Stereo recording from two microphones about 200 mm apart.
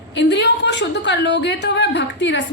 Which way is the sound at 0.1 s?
60° left (ahead or behind).